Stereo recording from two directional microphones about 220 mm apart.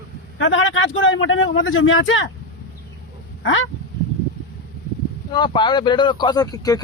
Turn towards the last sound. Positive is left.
turn(degrees=15)  # may be behind; listen again after turning